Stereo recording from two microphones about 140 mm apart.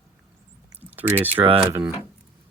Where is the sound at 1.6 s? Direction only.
10° right (ahead or behind).